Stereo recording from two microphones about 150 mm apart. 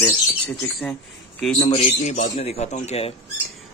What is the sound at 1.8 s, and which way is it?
A man's voice, 50° left (ahead or behind).